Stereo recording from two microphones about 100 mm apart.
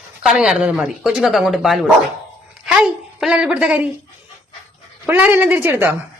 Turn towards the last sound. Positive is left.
turn(degrees=-20)  # may be behind; listen again after turning